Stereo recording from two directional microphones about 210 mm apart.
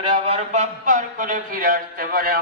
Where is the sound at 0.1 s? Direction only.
30° right (ahead or behind).